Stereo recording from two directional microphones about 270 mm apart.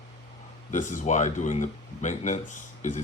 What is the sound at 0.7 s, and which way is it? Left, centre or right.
Speech, left.